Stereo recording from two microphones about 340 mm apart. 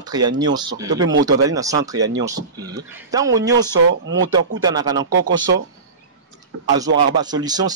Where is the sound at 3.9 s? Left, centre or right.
Right.